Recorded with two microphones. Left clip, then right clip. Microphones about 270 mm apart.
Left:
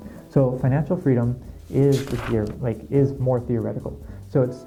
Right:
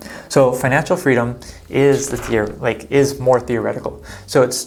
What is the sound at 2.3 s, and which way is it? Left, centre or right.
Speech, centre.